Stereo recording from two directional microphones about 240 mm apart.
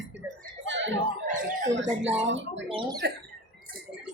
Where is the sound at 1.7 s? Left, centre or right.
Right.